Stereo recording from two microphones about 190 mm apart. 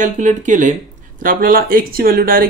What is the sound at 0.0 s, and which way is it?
Speech, 40° right (ahead or behind).